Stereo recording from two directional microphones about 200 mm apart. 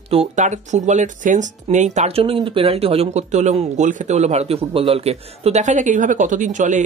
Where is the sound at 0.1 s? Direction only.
35° right (ahead or behind).